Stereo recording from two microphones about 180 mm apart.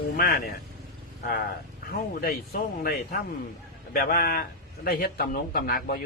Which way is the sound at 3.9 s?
55° left (ahead or behind).